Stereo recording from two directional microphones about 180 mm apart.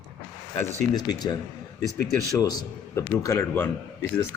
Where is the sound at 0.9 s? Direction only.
20° left (ahead or behind).